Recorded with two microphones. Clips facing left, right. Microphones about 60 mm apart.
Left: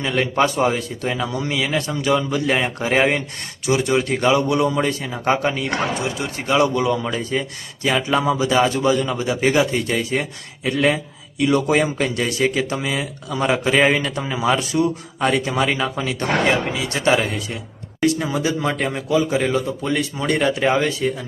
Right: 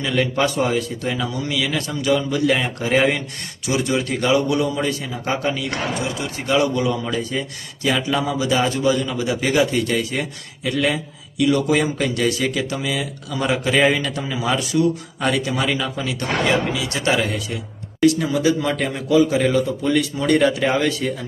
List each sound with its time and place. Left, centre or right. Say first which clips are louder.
0.0 s a man's voice: left 1 dB; left; by 21.1 s centre